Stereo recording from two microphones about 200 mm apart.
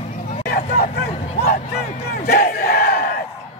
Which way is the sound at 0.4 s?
50° left (ahead or behind).